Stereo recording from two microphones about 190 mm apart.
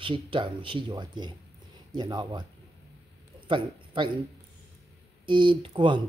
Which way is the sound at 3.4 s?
25° right (ahead or behind).